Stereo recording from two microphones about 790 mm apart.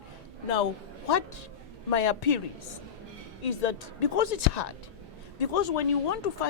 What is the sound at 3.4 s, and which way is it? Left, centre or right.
A woman's voice, left.